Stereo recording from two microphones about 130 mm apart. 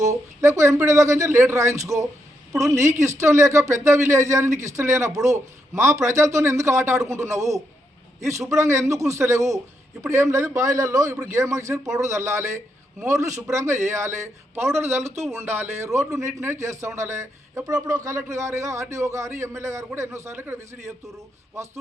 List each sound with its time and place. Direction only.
0.0 s a man's voice: 25° right (ahead or behind)